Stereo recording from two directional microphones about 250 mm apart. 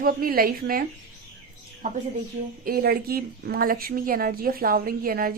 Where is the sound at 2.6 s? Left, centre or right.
Right.